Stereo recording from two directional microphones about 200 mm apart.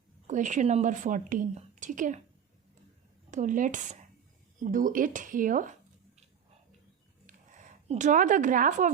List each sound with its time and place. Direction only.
0.3 s a woman's voice: 40° right (ahead or behind)
3.3 s a woman's voice: 40° right (ahead or behind)
7.9 s a woman's voice: 40° right (ahead or behind)